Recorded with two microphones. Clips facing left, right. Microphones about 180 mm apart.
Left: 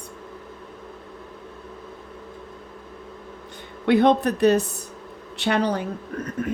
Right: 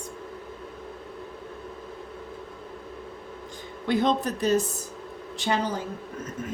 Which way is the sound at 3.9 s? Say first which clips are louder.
Left 6 dB; 65° left (ahead or behind).